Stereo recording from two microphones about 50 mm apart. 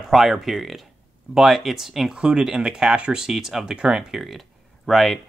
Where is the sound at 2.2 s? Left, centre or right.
Centre.